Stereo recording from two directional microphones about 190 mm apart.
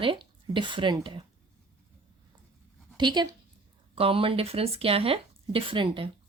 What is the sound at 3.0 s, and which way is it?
A woman's voice, 25° right (ahead or behind).